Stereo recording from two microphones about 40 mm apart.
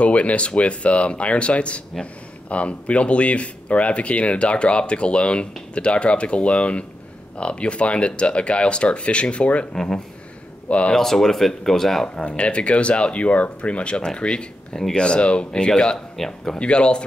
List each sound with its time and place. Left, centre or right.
0.0 s speech: left
10.9 s speech: centre
12.2 s speech: left
16.2 s speech: centre
16.5 s speech: left